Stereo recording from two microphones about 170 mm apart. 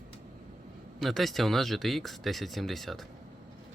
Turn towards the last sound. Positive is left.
turn(degrees=0)  # may be behind; listen again after turning